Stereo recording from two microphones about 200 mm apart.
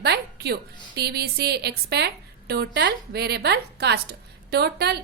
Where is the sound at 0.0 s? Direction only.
55° right (ahead or behind).